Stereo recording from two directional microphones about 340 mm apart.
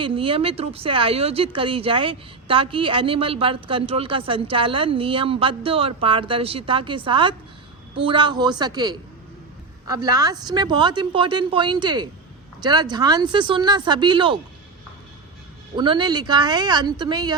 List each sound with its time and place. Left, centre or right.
0.0 s speech: centre
15.7 s speech: centre